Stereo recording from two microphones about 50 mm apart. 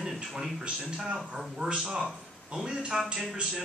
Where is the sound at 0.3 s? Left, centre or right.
Centre.